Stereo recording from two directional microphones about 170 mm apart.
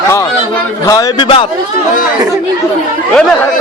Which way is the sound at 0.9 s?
25° left (ahead or behind).